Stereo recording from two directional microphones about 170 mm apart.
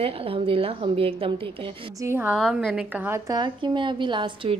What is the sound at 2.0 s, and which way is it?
A woman's voice, 15° right (ahead or behind).